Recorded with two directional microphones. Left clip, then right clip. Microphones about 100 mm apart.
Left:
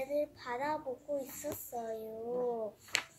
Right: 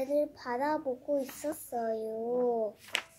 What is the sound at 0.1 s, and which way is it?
A child's voice, 35° right (ahead or behind).